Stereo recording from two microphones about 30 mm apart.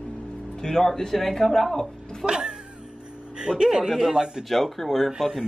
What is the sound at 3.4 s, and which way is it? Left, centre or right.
A woman's voice, right.